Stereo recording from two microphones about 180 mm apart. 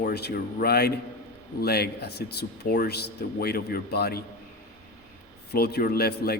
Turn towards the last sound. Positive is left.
turn(degrees=60)  # may be behind; listen again after turning